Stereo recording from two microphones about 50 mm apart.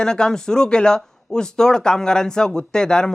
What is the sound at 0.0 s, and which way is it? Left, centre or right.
Speech, centre.